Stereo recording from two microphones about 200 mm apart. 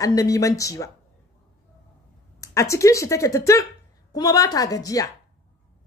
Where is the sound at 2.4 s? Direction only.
15° left (ahead or behind).